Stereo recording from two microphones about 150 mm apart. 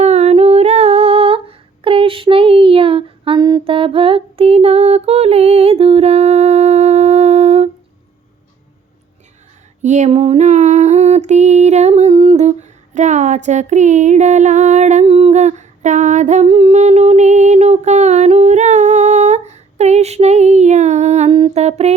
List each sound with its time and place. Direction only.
0.0 s humming: 45° right (ahead or behind)
3.6 s a sound: 35° right (ahead or behind)
9.8 s female singing: 50° right (ahead or behind)